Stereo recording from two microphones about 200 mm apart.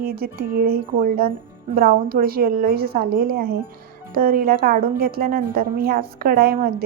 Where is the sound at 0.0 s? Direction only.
45° right (ahead or behind).